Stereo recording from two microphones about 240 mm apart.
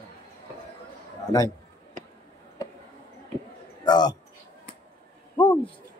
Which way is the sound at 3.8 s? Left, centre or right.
Centre.